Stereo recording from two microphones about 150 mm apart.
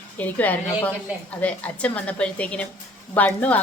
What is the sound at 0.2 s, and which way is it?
A woman's voice, 10° left (ahead or behind).